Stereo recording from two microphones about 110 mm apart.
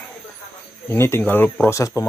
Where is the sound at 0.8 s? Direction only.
20° left (ahead or behind).